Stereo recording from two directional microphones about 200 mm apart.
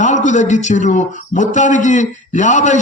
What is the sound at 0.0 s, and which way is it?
A man's voice, 35° left (ahead or behind).